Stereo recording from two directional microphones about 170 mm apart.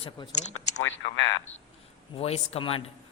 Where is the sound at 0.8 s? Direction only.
90° left.